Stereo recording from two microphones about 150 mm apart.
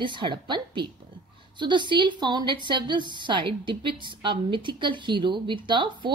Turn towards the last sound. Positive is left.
turn(degrees=-30)  # may be behind; listen again after turning